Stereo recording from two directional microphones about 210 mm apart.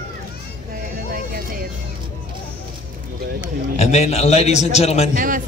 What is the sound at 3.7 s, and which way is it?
A man's voice, 30° left (ahead or behind).